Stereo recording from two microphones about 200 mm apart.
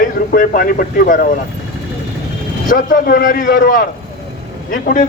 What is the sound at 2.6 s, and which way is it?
A man's voice, 45° left (ahead or behind).